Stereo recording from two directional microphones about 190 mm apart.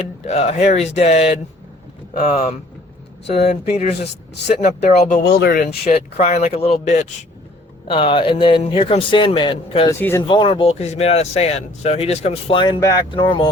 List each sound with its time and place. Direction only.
0.3 s speech: 35° left (ahead or behind)
5.2 s a man's voice: 55° left (ahead or behind); by 9.9 s 25° left (ahead or behind)
10.0 s speech: 10° left (ahead or behind)
10.2 s speech: 25° left (ahead or behind)